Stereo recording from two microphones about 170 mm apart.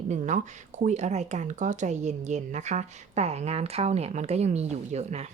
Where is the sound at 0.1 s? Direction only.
45° right (ahead or behind).